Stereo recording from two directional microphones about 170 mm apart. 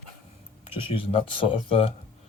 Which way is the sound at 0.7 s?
30° left (ahead or behind).